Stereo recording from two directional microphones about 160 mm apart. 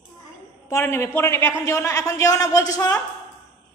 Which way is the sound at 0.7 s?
20° left (ahead or behind).